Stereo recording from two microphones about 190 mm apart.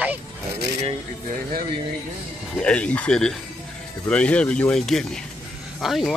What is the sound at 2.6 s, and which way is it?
Speech, 5° left (ahead or behind).